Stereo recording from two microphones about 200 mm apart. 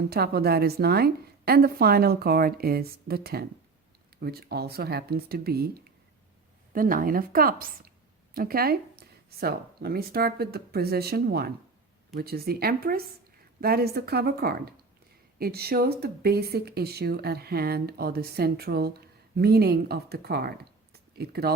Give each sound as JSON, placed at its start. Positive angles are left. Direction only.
{"t": 0.1, "sound": "speech", "side_deg": -50}
{"t": 6.7, "sound": "speech", "side_deg": -45}